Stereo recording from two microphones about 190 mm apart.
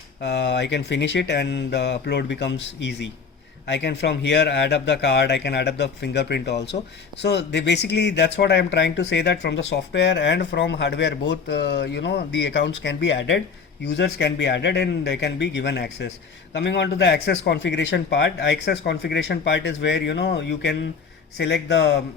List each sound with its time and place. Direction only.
0.2 s a man's voice: 65° left (ahead or behind)